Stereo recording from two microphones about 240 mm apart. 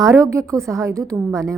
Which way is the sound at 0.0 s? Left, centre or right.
Centre.